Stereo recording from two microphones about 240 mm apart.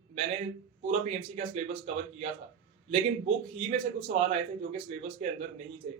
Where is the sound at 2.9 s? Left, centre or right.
Right.